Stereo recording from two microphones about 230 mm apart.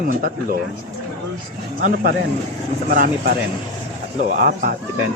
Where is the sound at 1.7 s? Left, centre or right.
Right.